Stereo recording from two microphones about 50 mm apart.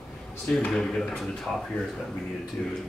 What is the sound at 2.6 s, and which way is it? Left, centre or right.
Speech, left.